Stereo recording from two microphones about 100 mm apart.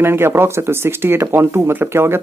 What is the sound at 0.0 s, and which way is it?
Speech, 25° right (ahead or behind).